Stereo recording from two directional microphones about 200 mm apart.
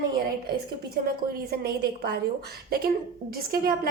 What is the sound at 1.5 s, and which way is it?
Speech, 50° right (ahead or behind).